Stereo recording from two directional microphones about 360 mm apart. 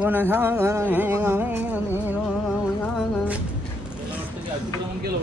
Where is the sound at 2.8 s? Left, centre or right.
Centre.